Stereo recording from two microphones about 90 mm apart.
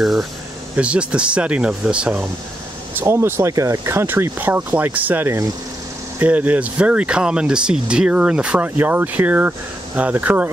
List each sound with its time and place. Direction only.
0.0 s speech: centre (ahead or behind)
2.9 s speech: 25° right (ahead or behind)